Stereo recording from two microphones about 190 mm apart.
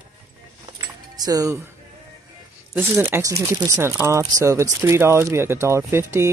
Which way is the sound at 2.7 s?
10° right (ahead or behind).